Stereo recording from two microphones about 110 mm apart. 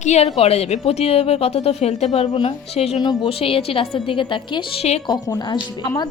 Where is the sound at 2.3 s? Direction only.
65° left (ahead or behind).